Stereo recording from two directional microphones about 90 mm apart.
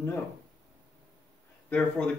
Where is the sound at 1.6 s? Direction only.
15° left (ahead or behind).